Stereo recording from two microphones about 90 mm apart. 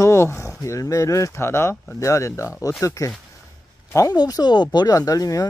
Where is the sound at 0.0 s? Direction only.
30° left (ahead or behind).